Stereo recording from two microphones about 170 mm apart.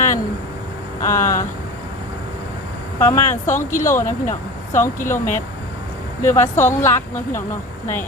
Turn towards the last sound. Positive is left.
turn(degrees=15)  # may be behind; listen again after turning